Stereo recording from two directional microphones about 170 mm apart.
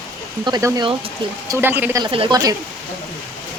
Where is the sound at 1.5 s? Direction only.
10° right (ahead or behind).